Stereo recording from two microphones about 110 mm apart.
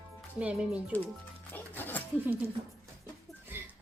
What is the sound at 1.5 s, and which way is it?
Music, 15° left (ahead or behind).